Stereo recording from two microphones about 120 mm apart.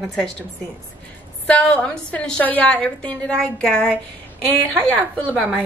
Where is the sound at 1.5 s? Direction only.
10° left (ahead or behind).